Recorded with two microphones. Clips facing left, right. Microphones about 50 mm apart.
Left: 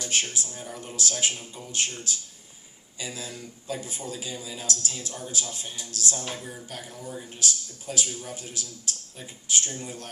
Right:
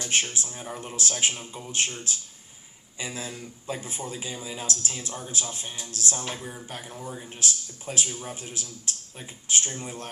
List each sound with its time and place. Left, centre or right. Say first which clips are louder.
0.0 s a man's voice: right 1 dB; right